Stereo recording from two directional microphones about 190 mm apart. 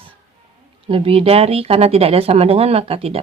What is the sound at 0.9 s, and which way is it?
Speech, 30° right (ahead or behind).